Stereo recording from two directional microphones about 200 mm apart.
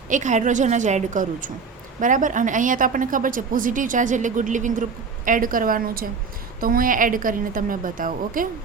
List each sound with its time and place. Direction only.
0.1 s a woman's voice: 40° right (ahead or behind)